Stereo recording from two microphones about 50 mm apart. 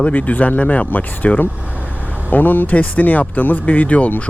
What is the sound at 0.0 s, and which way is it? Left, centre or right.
Speech, left.